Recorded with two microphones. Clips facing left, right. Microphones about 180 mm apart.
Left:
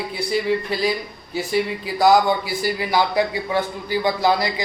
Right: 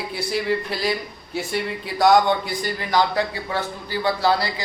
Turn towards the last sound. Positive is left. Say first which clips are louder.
# left 2 dB
turn(degrees=15)  # may be behind; listen again after turning